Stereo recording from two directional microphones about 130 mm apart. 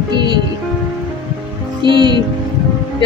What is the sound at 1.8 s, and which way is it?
Speech, 35° right (ahead or behind).